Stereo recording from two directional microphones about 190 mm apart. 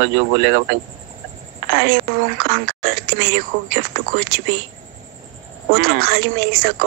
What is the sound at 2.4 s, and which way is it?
Speech, 55° right (ahead or behind).